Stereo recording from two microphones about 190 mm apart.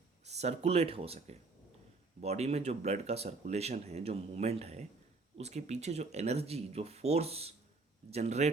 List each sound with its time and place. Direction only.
0.3 s speech: 35° right (ahead or behind)